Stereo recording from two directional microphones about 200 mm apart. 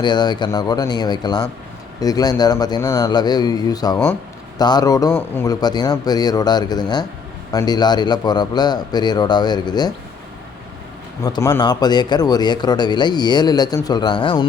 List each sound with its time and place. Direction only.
0.0 s a man's voice: 20° left (ahead or behind)
11.2 s a man's voice: 20° left (ahead or behind)